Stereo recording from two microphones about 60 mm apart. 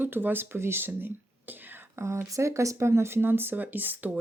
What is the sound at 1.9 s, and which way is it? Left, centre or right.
Speech, right.